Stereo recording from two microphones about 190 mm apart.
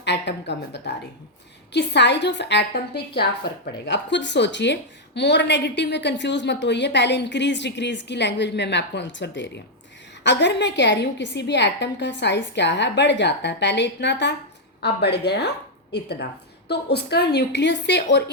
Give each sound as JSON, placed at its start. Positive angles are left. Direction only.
{"t": 0.0, "sound": "a woman's voice", "side_deg": 65}